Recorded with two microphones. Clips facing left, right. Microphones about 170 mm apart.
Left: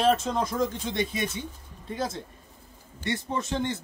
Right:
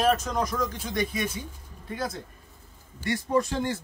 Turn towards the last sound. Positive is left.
turn(degrees=20)  # may be behind; listen again after turning